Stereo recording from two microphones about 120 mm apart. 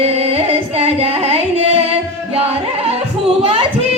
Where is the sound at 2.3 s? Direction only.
55° right (ahead or behind).